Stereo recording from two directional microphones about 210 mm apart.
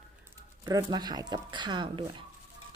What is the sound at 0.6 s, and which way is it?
Speech, 20° right (ahead or behind).